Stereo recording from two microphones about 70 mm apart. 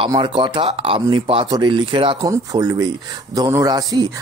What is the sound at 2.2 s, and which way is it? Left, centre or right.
Speech, right.